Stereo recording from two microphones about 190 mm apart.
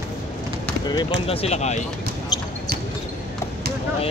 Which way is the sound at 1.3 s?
35° left (ahead or behind).